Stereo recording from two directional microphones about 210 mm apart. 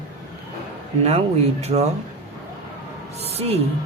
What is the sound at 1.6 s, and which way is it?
Speech, 30° right (ahead or behind).